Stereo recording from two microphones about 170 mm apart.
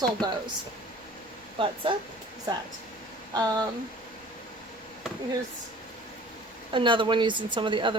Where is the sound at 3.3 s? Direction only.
25° right (ahead or behind).